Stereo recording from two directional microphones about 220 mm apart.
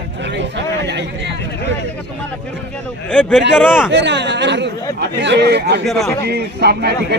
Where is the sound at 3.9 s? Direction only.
50° right (ahead or behind).